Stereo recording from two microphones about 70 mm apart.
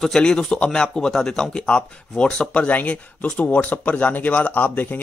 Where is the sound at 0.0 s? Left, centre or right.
Centre.